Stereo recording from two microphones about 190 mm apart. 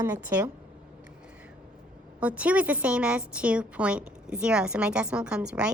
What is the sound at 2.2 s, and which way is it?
A woman's voice, 5° right (ahead or behind).